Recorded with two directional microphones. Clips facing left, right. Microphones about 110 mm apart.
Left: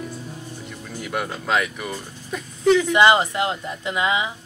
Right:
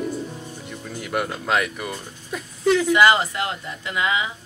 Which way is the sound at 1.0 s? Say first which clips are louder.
Right 1 dB; centre (ahead or behind).